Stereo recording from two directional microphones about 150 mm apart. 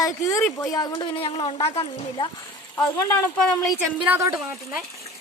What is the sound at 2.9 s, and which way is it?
Speech, 20° left (ahead or behind).